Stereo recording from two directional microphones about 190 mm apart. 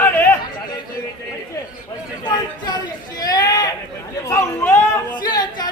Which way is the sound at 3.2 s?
20° left (ahead or behind).